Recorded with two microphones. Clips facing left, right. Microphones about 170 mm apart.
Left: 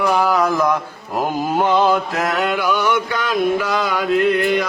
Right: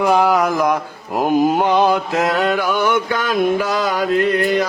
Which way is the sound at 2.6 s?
50° right (ahead or behind).